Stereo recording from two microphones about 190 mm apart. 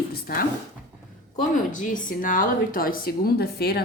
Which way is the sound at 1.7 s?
45° left (ahead or behind).